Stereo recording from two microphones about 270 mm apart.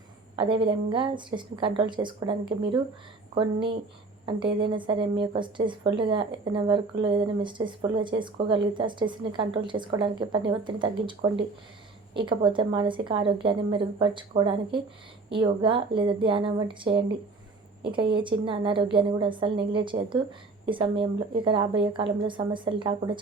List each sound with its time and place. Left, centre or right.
0.3 s speech: centre